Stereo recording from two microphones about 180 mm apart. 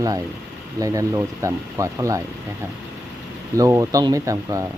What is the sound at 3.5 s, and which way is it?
Speech, 20° right (ahead or behind).